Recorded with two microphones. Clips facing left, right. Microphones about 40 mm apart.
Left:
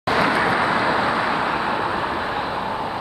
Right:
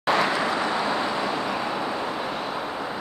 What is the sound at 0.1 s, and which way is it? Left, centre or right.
Vehicle, centre.